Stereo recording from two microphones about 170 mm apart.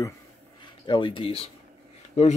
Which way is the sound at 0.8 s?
30° left (ahead or behind).